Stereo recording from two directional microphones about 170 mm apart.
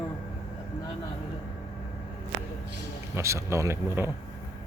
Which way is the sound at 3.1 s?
15° right (ahead or behind).